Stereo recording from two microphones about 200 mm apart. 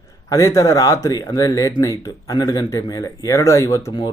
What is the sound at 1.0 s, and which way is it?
Speech, 15° left (ahead or behind).